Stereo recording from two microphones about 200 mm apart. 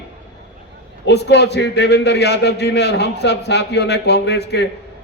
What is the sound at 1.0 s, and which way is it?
A man's voice, 55° left (ahead or behind).